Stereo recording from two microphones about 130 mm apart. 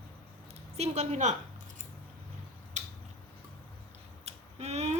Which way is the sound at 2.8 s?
65° right (ahead or behind).